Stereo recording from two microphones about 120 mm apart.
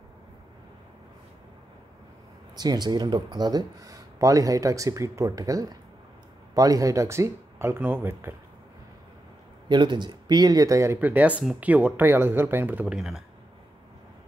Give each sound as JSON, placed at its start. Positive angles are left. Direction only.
{"t": 2.5, "sound": "speech", "side_deg": -35}
{"t": 9.7, "sound": "speech", "side_deg": -40}
{"t": 12.8, "sound": "speech", "side_deg": -5}